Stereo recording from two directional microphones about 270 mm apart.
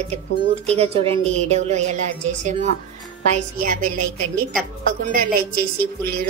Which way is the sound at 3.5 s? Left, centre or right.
Right.